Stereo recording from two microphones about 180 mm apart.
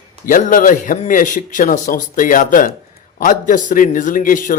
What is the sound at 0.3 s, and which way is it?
Speech, 50° left (ahead or behind).